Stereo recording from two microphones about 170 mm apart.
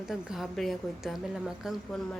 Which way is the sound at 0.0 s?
Centre (ahead or behind).